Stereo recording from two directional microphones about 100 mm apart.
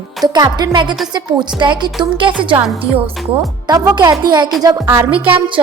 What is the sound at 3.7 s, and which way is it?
Speech, 40° right (ahead or behind).